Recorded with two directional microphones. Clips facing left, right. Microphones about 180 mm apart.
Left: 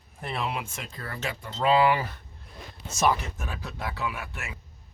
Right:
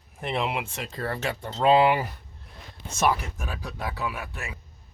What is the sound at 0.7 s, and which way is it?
Speech, 35° right (ahead or behind).